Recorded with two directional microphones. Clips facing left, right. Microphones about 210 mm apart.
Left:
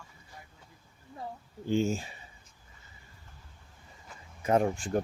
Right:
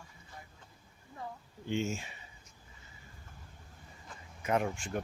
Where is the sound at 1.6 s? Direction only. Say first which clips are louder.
Left 6 dB; 35° left (ahead or behind).